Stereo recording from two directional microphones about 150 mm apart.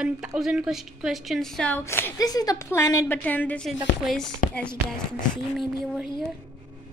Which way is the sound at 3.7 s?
Centre (ahead or behind).